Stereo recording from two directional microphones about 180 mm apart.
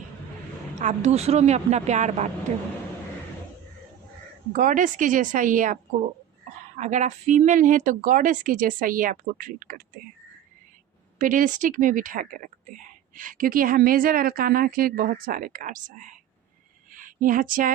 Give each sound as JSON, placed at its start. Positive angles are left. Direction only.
{"t": 0.8, "sound": "speech", "side_deg": -40}
{"t": 4.5, "sound": "speech", "side_deg": -45}
{"t": 11.2, "sound": "speech", "side_deg": -45}
{"t": 16.9, "sound": "a sound", "side_deg": -50}